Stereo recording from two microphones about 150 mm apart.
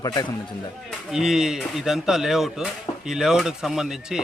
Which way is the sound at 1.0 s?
5° right (ahead or behind).